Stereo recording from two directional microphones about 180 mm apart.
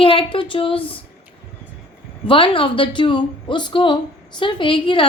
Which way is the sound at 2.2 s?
30° left (ahead or behind).